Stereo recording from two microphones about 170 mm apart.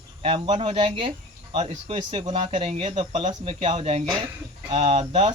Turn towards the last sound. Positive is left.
turn(degrees=-35)  # may be behind; listen again after turning